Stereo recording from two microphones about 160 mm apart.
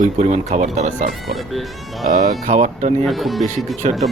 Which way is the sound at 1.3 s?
Centre (ahead or behind).